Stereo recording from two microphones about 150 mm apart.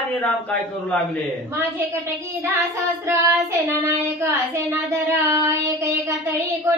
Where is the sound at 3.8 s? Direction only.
15° right (ahead or behind).